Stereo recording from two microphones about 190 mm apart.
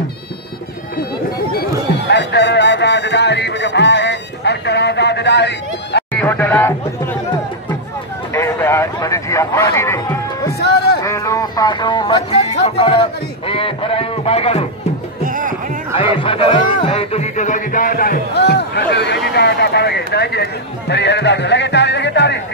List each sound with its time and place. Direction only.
2.0 s music: 65° left (ahead or behind)
6.1 s speech: 10° left (ahead or behind)
8.3 s a sound: 15° left (ahead or behind)
10.6 s a sound: 60° left (ahead or behind)
11.0 s a sound: 15° left (ahead or behind)
15.2 s music: 45° right (ahead or behind)
15.9 s chatter: 30° left (ahead or behind)
16.8 s music: 30° left (ahead or behind); by 20.4 s 60° left (ahead or behind)
20.9 s speech: 65° left (ahead or behind)